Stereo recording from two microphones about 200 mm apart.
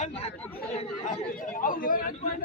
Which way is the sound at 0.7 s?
35° left (ahead or behind).